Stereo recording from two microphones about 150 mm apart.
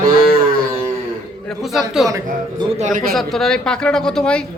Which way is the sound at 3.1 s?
Centre (ahead or behind).